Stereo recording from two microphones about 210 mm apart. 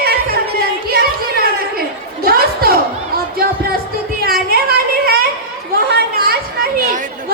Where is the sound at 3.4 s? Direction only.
45° right (ahead or behind).